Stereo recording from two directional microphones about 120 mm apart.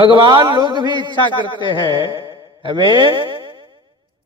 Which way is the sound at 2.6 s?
40° right (ahead or behind).